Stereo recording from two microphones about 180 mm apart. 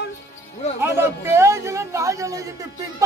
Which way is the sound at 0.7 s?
10° right (ahead or behind).